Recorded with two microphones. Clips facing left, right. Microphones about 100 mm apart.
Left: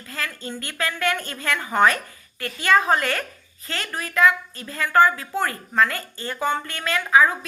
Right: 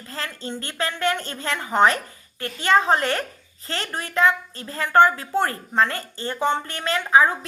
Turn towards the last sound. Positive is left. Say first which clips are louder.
# even
turn(degrees=-30)  # may be behind; listen again after turning